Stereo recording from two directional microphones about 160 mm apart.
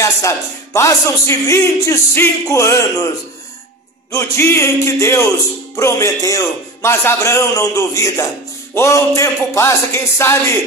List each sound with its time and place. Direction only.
0.7 s a man's voice: 20° left (ahead or behind)
4.1 s a man's voice: 15° left (ahead or behind)